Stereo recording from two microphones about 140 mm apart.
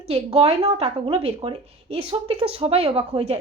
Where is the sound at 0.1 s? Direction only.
45° right (ahead or behind).